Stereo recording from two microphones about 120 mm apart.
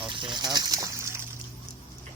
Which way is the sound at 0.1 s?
40° right (ahead or behind).